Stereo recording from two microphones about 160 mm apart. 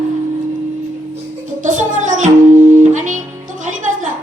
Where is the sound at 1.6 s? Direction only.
50° right (ahead or behind).